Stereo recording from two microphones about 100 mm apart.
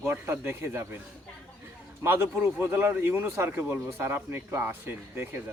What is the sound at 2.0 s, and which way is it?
Speech, 25° right (ahead or behind).